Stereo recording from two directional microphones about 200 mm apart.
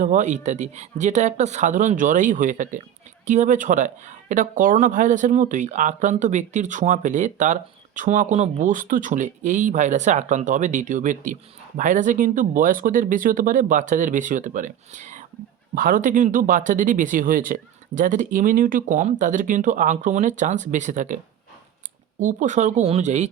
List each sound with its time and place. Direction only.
0.0 s speech: 40° right (ahead or behind)
22.2 s speech: 40° right (ahead or behind)